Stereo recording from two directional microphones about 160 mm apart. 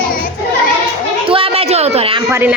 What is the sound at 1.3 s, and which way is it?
Speech, 35° right (ahead or behind).